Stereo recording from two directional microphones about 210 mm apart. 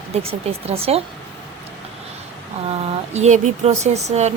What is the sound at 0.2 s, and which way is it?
Speech, 30° right (ahead or behind).